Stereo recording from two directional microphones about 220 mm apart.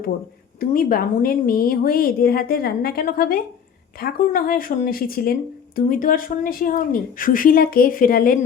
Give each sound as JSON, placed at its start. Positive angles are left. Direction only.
{"t": 0.6, "sound": "speech", "side_deg": 40}